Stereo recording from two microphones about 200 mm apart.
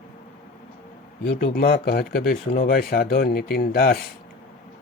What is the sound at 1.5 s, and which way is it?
Speech, 50° left (ahead or behind).